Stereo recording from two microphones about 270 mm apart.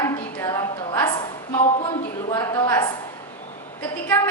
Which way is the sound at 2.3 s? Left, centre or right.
Centre.